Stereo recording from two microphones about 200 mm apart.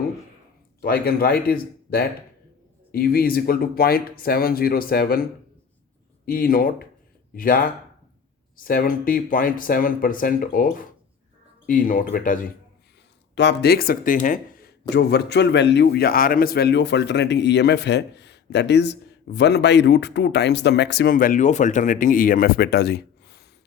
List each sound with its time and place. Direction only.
0.8 s speech: 50° left (ahead or behind)
13.3 s speech: 60° left (ahead or behind); by 14.7 s 45° left (ahead or behind)
14.8 s a man's voice: 55° left (ahead or behind)